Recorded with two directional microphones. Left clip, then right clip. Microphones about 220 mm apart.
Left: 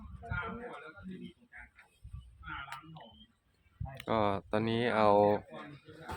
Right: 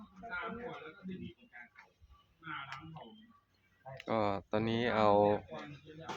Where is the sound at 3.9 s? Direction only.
25° left (ahead or behind).